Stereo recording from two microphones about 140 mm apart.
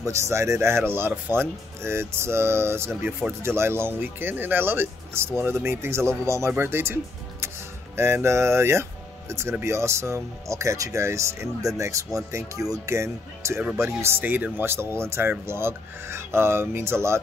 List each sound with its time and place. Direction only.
0.0 s speech: 20° right (ahead or behind)